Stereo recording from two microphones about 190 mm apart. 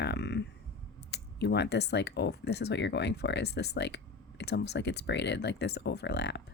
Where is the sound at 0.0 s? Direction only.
65° left (ahead or behind).